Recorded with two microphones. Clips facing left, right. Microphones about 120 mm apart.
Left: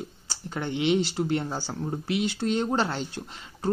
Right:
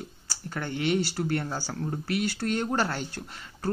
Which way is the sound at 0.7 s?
45° right (ahead or behind).